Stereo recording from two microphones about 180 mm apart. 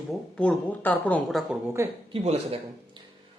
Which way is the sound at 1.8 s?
15° right (ahead or behind).